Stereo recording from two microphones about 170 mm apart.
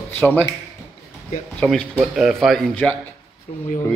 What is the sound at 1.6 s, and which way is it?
Speech, 5° left (ahead or behind).